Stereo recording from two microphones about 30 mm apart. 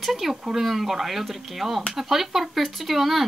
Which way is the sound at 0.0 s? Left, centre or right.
Centre.